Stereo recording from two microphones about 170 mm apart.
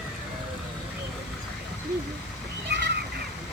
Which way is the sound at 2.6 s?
80° right.